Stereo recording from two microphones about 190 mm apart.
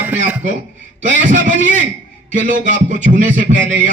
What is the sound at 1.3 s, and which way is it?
Speech, 40° right (ahead or behind).